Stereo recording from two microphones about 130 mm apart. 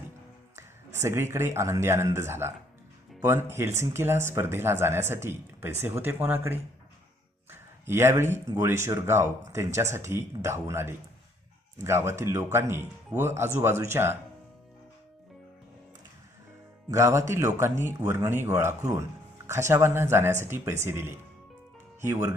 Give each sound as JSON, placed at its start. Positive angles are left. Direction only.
{"t": 1.0, "sound": "speech", "side_deg": -20}
{"t": 16.9, "sound": "speech", "side_deg": -25}